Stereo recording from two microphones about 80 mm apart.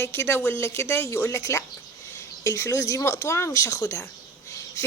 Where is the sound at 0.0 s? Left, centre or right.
Left.